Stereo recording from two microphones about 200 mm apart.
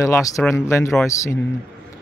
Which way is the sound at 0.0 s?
15° left (ahead or behind).